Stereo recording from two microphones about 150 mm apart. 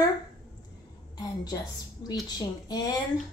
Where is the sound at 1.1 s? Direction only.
25° left (ahead or behind).